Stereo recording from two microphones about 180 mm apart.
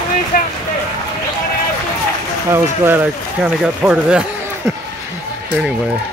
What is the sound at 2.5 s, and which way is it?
Speech, 10° right (ahead or behind).